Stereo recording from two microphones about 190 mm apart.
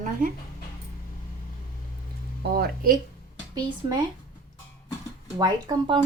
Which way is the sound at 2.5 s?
50° right (ahead or behind).